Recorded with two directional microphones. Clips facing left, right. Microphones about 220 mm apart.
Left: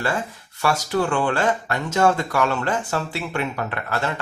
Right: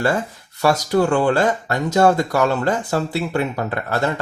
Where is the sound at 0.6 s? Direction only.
40° right (ahead or behind).